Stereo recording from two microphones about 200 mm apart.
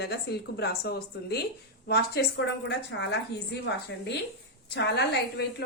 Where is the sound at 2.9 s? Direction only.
70° left (ahead or behind).